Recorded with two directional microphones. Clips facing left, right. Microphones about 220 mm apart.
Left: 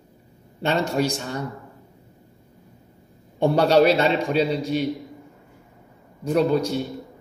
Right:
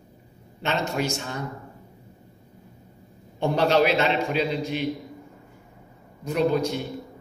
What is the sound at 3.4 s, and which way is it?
A man's voice, 35° left (ahead or behind).